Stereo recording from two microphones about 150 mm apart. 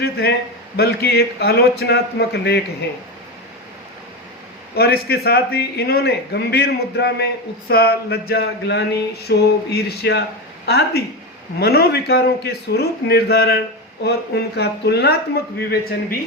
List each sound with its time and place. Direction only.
0.0 s a man's voice: 90° left
4.7 s a man's voice: 90° left